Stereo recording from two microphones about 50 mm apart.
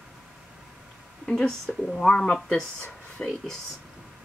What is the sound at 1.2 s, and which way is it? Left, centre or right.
Speech, centre.